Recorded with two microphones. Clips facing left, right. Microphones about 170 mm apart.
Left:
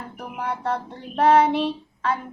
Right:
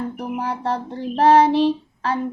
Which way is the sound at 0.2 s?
30° right (ahead or behind).